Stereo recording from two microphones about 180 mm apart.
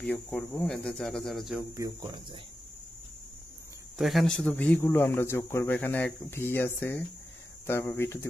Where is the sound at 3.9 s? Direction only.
Centre (ahead or behind).